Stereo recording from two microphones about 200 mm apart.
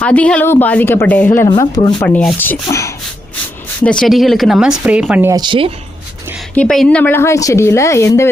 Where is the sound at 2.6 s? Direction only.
15° left (ahead or behind).